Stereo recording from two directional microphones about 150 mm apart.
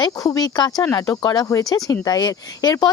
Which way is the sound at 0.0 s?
25° left (ahead or behind).